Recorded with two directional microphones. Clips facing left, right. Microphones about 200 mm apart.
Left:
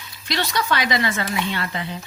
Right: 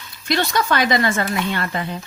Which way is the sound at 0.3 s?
50° right (ahead or behind).